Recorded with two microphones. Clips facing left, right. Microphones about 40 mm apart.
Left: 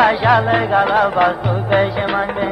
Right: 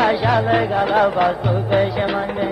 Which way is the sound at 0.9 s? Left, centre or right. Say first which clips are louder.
Right 1 dB; centre.